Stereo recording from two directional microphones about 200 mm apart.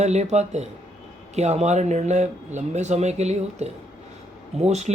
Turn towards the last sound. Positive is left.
turn(degrees=-35)  # may be behind; listen again after turning